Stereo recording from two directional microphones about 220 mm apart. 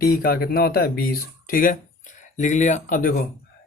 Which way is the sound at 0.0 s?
40° left (ahead or behind).